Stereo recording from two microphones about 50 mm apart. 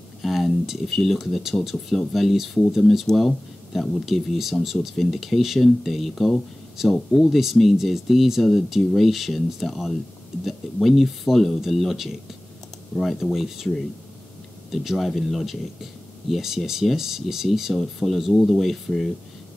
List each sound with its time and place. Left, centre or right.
0.2 s speech: centre
3.1 s speech: centre
4.0 s speech: centre
7.5 s speech: centre
14.7 s speech: centre